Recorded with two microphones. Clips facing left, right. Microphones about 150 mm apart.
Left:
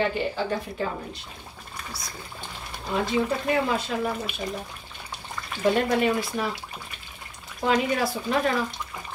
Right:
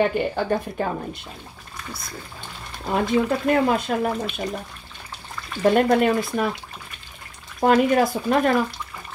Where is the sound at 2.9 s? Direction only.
55° right (ahead or behind).